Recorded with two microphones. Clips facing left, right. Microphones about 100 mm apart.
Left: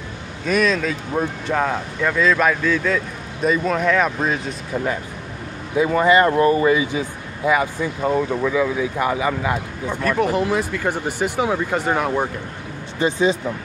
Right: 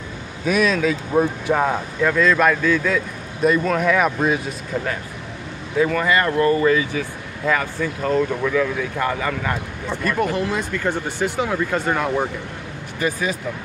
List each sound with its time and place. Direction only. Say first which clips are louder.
0.5 s speech: right 1 dB; 5° right (ahead or behind)
5.8 s speech: left 3 dB; 20° left (ahead or behind)
10.0 s speech: left 2 dB; centre (ahead or behind)
13.0 s speech: left 5 dB; 25° left (ahead or behind)